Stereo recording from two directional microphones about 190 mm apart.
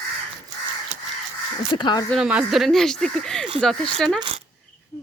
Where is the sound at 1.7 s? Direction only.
25° left (ahead or behind).